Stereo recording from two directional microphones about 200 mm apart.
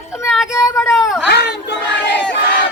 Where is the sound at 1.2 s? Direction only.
60° left (ahead or behind).